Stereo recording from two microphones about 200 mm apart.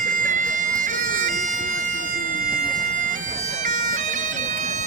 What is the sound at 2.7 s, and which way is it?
Bagpipes, 40° right (ahead or behind).